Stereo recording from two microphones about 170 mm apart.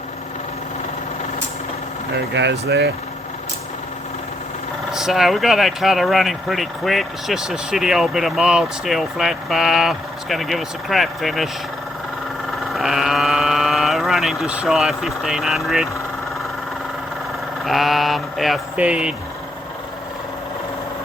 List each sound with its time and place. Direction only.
2.1 s speech: 90° right
4.9 s speech: 5° right (ahead or behind)
12.5 s sheep: centre (ahead or behind)
17.7 s speech: centre (ahead or behind)